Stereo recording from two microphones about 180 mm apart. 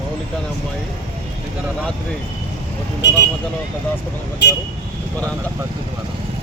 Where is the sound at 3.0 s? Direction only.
75° left (ahead or behind).